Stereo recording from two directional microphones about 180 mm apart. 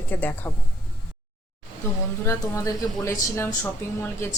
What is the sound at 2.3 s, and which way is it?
Speech, 15° left (ahead or behind).